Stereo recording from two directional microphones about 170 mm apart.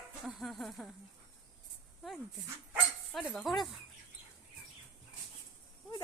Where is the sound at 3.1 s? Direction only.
Centre (ahead or behind).